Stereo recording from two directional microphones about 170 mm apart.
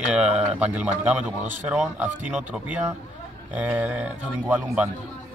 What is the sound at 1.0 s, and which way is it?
Speech, 10° right (ahead or behind).